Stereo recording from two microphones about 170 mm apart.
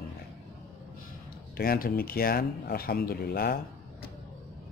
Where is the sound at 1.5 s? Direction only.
60° left (ahead or behind).